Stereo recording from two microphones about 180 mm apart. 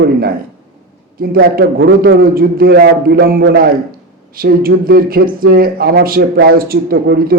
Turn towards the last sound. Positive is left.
turn(degrees=-55)  # may be behind; listen again after turning